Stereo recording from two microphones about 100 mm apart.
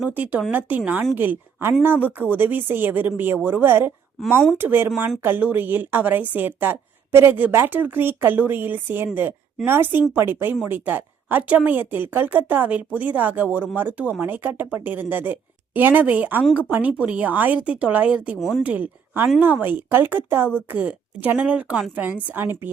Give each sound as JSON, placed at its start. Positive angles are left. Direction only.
{"t": 0.1, "sound": "a woman's voice", "side_deg": -15}
{"t": 18.3, "sound": "speech", "side_deg": 0}
{"t": 18.6, "sound": "a woman's voice", "side_deg": -15}